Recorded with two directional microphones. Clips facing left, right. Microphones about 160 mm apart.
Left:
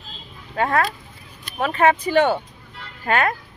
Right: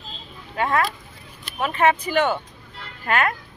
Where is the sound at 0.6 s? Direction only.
40° left (ahead or behind).